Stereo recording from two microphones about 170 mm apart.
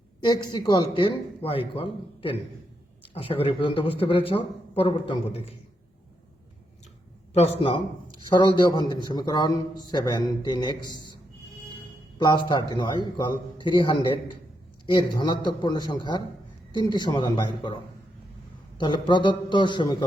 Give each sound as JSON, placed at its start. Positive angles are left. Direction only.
{"t": 0.5, "sound": "a man's voice", "side_deg": 25}
{"t": 7.3, "sound": "a man's voice", "side_deg": 35}
{"t": 12.2, "sound": "a man's voice", "side_deg": 25}
{"t": 18.8, "sound": "a man's voice", "side_deg": 30}